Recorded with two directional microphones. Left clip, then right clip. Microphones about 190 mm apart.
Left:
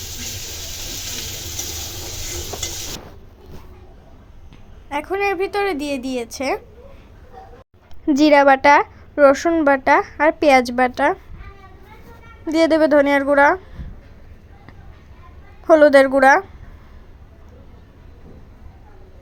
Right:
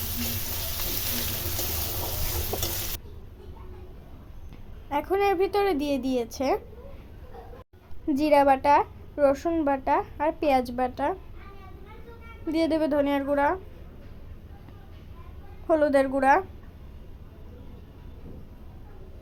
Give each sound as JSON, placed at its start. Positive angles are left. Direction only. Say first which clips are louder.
{"t": 2.5, "sound": "stir", "louder": "left 3 dB", "side_deg": 0}
{"t": 4.9, "sound": "a woman's voice", "louder": "left 3 dB", "side_deg": 10}
{"t": 8.0, "sound": "a woman's voice", "louder": "left 8 dB", "side_deg": 30}
{"t": 12.5, "sound": "a woman's voice", "louder": "left 10 dB", "side_deg": 20}
{"t": 15.6, "sound": "a woman's voice", "louder": "left 11 dB", "side_deg": 25}